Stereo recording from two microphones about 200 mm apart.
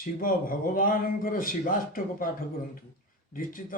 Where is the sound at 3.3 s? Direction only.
45° left (ahead or behind).